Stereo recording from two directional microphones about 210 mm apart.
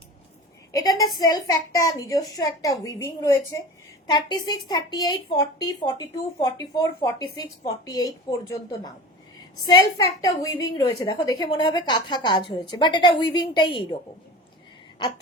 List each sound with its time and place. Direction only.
0.7 s a woman's voice: 15° left (ahead or behind)
9.6 s a woman's voice: 20° left (ahead or behind)